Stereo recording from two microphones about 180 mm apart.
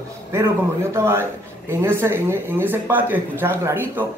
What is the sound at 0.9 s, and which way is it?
A man's voice, 15° right (ahead or behind).